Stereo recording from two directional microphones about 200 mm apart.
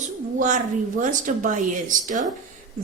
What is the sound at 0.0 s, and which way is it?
A woman's voice, 40° right (ahead or behind).